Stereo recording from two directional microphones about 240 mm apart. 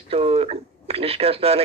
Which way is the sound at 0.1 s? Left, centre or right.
Right.